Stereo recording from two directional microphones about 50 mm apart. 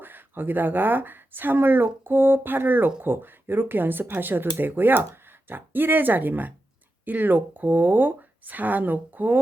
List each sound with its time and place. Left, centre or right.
0.0 s speech: right